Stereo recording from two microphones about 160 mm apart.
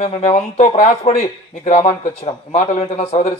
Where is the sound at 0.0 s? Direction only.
50° left (ahead or behind).